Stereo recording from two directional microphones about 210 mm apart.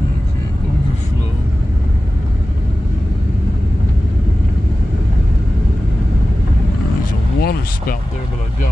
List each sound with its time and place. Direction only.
7.3 s vehicle: 45° left (ahead or behind)